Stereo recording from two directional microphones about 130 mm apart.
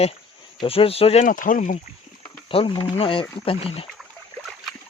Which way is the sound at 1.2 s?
90° left.